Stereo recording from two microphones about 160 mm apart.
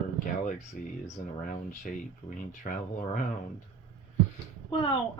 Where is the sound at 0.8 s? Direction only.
60° left (ahead or behind).